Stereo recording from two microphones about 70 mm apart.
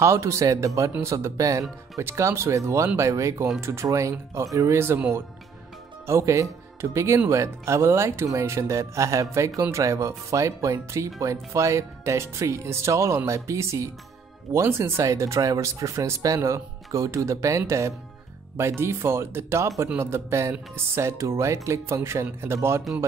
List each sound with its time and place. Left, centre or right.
0.0 s speech: right
6.0 s speech: right
16.3 s speech: right